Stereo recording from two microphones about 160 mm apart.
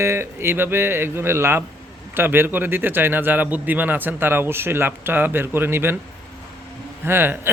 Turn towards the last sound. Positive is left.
turn(degrees=-15)  # may be behind; listen again after turning